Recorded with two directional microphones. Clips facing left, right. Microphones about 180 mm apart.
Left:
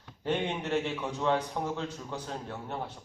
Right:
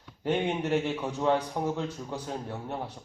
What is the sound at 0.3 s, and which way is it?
Speech, 10° right (ahead or behind).